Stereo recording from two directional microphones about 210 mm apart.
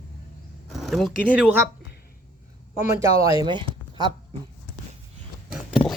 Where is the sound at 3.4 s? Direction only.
20° right (ahead or behind).